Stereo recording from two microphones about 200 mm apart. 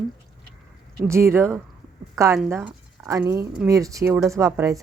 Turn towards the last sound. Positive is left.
turn(degrees=-15)  # may be behind; listen again after turning